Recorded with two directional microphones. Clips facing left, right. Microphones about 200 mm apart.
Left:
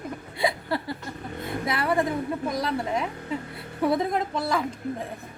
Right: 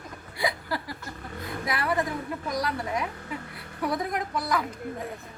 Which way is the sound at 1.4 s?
25° left (ahead or behind).